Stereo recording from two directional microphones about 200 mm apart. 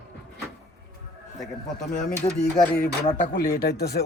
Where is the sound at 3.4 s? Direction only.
50° left (ahead or behind).